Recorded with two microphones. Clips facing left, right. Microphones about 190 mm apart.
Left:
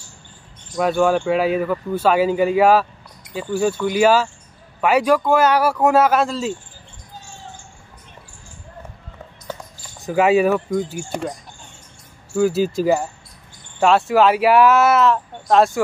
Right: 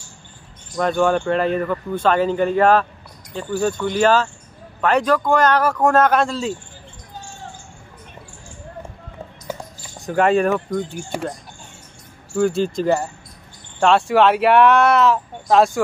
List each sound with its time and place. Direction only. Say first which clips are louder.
0.7 s speech: left 1 dB; 5° left (ahead or behind)
9.9 s speech: left 1 dB; 5° left (ahead or behind)
12.4 s speech: left 1 dB; 5° left (ahead or behind)